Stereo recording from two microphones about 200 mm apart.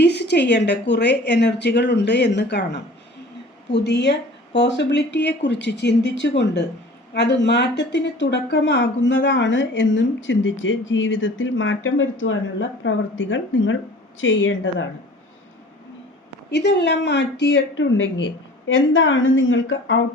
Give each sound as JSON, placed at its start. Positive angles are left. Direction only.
{"t": 0.0, "sound": "a woman's voice", "side_deg": 60}
{"t": 16.5, "sound": "a woman's voice", "side_deg": 60}